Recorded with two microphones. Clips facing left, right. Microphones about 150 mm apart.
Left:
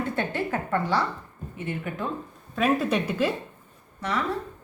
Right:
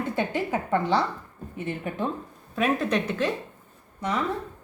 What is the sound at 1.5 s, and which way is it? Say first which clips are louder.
Speech: right 1 dB; 30° right (ahead or behind).